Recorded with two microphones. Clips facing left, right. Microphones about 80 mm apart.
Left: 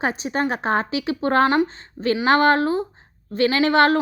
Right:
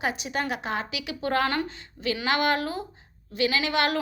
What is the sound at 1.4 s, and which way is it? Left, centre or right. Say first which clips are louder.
Speech: left 9 dB; left.